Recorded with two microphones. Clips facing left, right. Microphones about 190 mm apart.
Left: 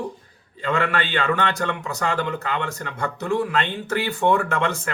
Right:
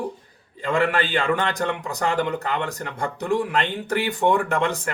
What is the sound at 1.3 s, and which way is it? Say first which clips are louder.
Speech: even; 15° right (ahead or behind).